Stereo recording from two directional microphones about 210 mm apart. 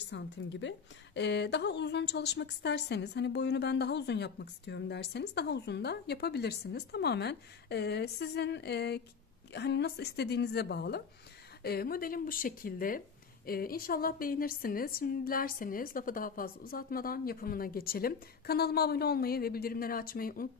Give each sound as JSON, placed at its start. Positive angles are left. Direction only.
{"t": 0.1, "sound": "a woman's voice", "side_deg": 60}